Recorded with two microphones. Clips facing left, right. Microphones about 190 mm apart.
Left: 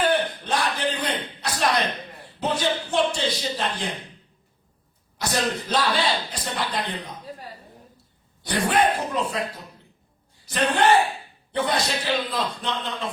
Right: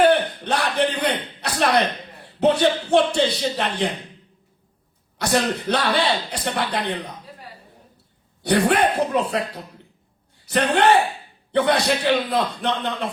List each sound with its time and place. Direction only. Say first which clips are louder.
0.0 s a sound: right 6 dB; 65° right (ahead or behind)
2.4 s speech: right 7 dB; 65° right (ahead or behind)
5.1 s speech: right 4 dB; 65° right (ahead or behind)
8.4 s speech: right 4 dB; 65° right (ahead or behind)
10.4 s speech: right 3 dB; 65° right (ahead or behind)